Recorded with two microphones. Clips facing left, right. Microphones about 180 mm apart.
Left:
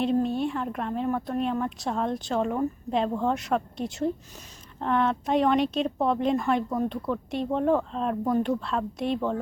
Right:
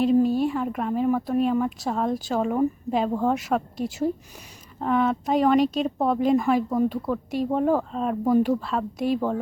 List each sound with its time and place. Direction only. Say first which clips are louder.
0.0 s speech: right 5 dB; 5° right (ahead or behind)